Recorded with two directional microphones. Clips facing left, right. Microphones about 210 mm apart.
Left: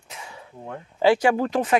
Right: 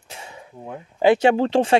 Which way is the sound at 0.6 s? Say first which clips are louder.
Right 2 dB; 15° right (ahead or behind).